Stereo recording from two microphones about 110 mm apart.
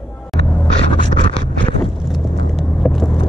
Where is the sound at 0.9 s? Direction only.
50° left (ahead or behind).